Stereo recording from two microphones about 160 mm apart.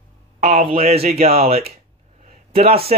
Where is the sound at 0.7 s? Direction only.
40° right (ahead or behind).